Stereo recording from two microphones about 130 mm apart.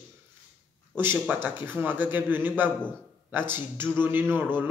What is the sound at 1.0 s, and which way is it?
Speech, 15° right (ahead or behind).